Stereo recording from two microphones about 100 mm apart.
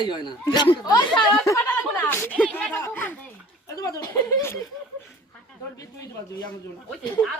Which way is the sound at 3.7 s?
35° left (ahead or behind).